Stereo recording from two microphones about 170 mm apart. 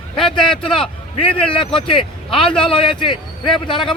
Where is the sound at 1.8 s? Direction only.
30° left (ahead or behind).